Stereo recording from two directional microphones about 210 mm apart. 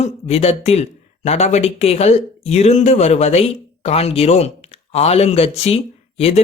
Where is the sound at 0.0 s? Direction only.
30° left (ahead or behind).